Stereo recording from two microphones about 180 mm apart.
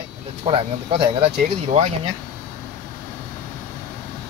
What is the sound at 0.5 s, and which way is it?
Speech, 30° right (ahead or behind).